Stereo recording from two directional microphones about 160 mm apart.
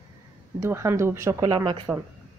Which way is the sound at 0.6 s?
15° right (ahead or behind).